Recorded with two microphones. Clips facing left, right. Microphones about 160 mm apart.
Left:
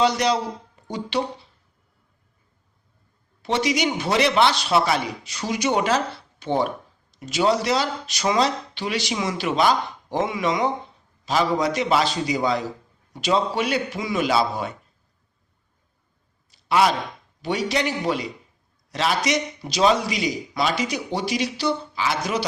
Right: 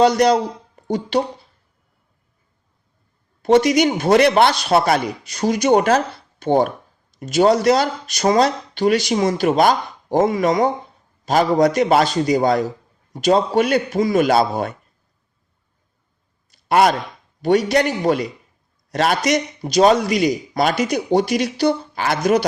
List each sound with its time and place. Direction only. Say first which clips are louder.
0.0 s a man's voice: right 6 dB; 50° right (ahead or behind)
3.4 s a man's voice: right 8 dB; 50° right (ahead or behind)
16.5 s a sound: right 4 dB; 50° right (ahead or behind)
17.4 s a man's voice: right 8 dB; 50° right (ahead or behind)